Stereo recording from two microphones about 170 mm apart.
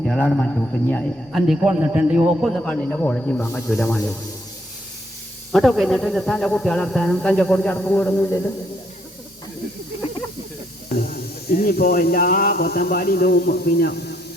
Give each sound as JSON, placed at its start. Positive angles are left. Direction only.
{"t": 0.0, "sound": "a man's voice", "side_deg": 0}
{"t": 5.5, "sound": "a man's voice", "side_deg": 0}
{"t": 11.0, "sound": "speech", "side_deg": 60}